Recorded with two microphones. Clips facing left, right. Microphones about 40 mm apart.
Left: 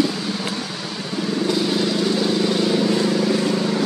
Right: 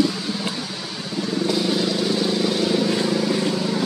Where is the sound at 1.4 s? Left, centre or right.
Centre.